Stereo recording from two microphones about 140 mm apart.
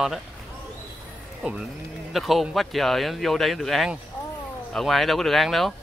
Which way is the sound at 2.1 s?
Centre (ahead or behind).